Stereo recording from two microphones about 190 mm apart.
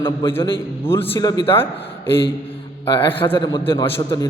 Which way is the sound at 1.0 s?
20° left (ahead or behind).